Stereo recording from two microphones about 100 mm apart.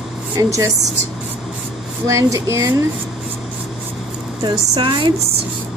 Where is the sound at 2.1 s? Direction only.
35° right (ahead or behind).